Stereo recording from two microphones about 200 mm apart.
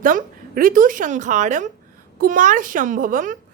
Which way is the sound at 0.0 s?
45° right (ahead or behind).